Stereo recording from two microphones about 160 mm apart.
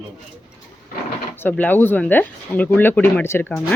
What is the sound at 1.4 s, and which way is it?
Speech, 10° left (ahead or behind).